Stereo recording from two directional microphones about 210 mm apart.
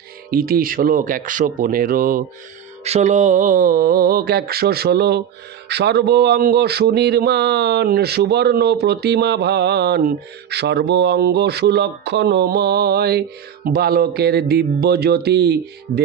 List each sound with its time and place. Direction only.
0.3 s speech: 45° right (ahead or behind)
2.8 s speech: 30° right (ahead or behind); by 16.0 s 50° right (ahead or behind)